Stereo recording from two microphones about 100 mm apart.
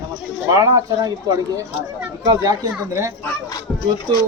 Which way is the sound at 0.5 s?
40° right (ahead or behind).